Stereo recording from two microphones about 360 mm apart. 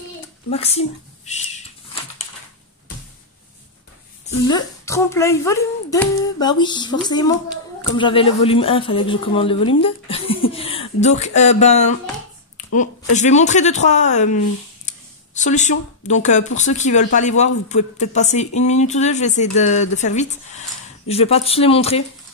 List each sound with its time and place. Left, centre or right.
0.5 s a child's voice: centre
4.3 s speech: centre